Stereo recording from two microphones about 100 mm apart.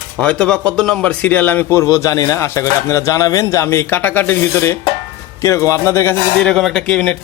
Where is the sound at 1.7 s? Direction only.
30° left (ahead or behind).